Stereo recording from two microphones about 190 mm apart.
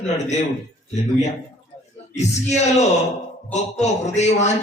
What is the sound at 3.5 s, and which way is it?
A man's voice, 35° left (ahead or behind).